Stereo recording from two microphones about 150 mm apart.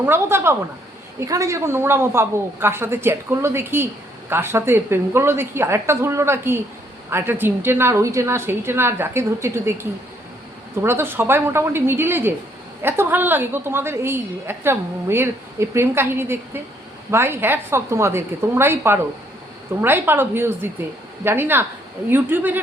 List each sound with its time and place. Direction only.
0.0 s a woman's voice: 15° right (ahead or behind)